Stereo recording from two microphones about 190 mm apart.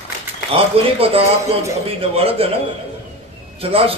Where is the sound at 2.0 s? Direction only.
30° right (ahead or behind).